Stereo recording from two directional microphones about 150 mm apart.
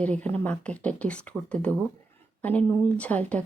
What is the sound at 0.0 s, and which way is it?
Speech, 10° left (ahead or behind).